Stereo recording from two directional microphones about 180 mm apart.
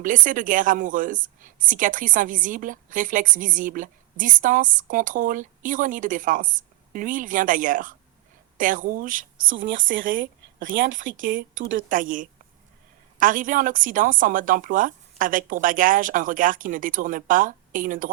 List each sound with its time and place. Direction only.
0.0 s a woman's voice: 45° right (ahead or behind)
9.5 s speech: 90° right
10.0 s a woman's voice: 50° right (ahead or behind)